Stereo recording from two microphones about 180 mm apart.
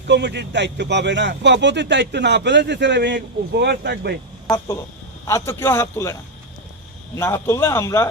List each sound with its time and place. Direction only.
0.1 s a man's voice: 70° right (ahead or behind)
5.2 s a man's voice: 15° left (ahead or behind)
7.2 s a man's voice: 15° left (ahead or behind)